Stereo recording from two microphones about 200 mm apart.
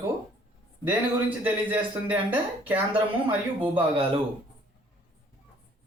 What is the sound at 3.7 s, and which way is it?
Speech, 25° right (ahead or behind).